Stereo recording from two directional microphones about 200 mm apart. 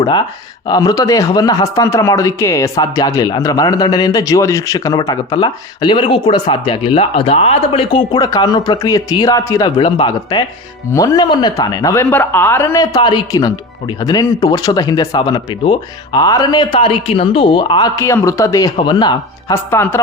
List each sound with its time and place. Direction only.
0.0 s speech: 25° left (ahead or behind)